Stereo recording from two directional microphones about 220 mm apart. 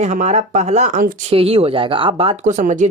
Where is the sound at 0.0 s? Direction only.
35° right (ahead or behind).